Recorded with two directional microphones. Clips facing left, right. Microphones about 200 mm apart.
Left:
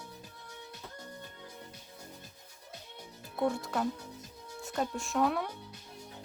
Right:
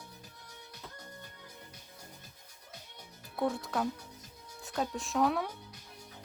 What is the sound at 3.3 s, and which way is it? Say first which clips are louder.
Speech: left 1 dB; centre (ahead or behind).